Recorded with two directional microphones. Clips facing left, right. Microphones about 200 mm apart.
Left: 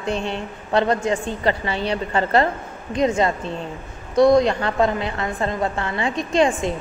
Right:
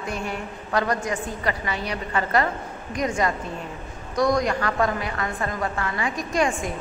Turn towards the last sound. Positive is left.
turn(degrees=25)  # may be behind; listen again after turning